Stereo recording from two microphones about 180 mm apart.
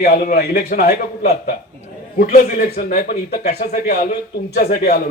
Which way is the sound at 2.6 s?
60° left (ahead or behind).